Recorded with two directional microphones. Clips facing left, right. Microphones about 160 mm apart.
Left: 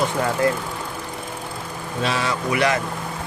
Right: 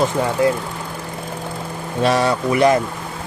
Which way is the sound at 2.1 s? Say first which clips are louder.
Right 7 dB; 35° right (ahead or behind).